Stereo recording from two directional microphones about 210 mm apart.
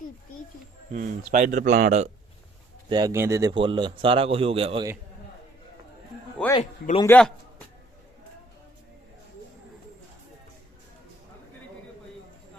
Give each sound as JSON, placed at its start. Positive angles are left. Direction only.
{"t": 0.9, "sound": "speech", "side_deg": -40}
{"t": 2.9, "sound": "a man's voice", "side_deg": -15}
{"t": 6.6, "sound": "a man's voice", "side_deg": 30}
{"t": 7.0, "sound": "a man's voice", "side_deg": 5}